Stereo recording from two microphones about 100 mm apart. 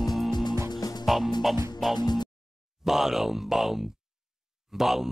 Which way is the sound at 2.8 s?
5° right (ahead or behind).